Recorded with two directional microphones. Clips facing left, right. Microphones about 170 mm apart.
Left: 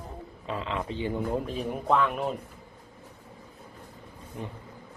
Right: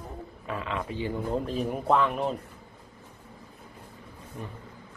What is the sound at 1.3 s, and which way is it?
Speech, centre (ahead or behind).